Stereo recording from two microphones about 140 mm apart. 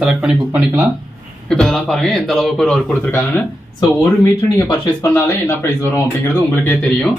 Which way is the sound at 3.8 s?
20° left (ahead or behind).